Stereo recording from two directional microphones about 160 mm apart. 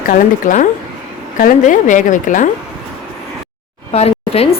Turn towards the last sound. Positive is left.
turn(degrees=40)  # may be behind; listen again after turning